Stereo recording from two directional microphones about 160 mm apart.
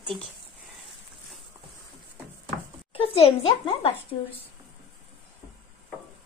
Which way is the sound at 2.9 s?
35° left (ahead or behind).